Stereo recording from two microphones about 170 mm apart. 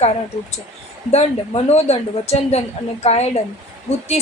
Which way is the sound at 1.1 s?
40° left (ahead or behind).